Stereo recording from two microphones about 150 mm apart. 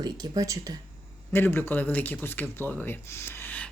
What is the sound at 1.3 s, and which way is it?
Speech, 15° left (ahead or behind).